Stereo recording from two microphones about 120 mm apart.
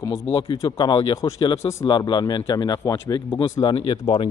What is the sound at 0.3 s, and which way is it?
Speech, 50° left (ahead or behind).